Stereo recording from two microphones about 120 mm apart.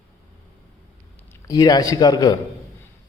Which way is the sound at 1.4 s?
30° left (ahead or behind).